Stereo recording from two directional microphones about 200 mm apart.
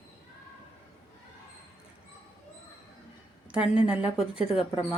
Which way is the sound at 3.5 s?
5° right (ahead or behind).